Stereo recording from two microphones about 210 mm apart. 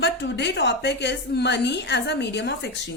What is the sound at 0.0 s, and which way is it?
A woman's voice, 55° left (ahead or behind).